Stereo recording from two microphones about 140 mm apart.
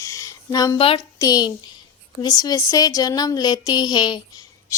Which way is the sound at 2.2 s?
30° left (ahead or behind).